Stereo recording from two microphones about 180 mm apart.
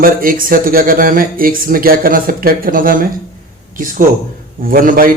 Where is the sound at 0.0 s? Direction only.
50° right (ahead or behind).